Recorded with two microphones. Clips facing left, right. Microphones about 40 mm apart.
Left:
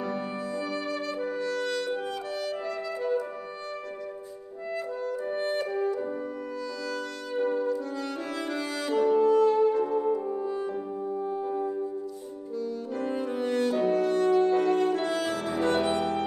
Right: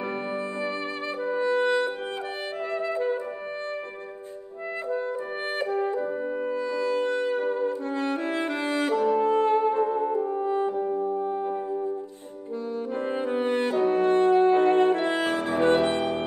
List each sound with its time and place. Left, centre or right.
1.2 s music: right
5.6 s brass instrument: right
8.9 s music: right
9.2 s music: right
10.1 s french horn: right
12.5 s brass instrument: right